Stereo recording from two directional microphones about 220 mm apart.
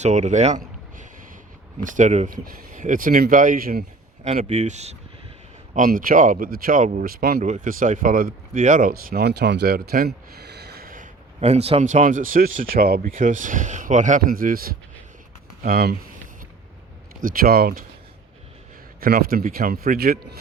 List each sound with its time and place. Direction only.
0.0 s speech: 30° right (ahead or behind)
17.2 s speech: 40° right (ahead or behind)
18.9 s speech: 40° right (ahead or behind)